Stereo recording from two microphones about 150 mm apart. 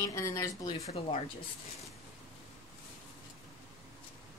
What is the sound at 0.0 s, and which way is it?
Speech, 20° left (ahead or behind).